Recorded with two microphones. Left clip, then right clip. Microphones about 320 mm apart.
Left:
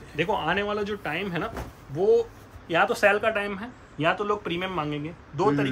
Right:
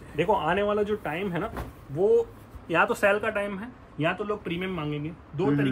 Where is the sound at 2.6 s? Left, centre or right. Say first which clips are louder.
Left 1 dB; centre.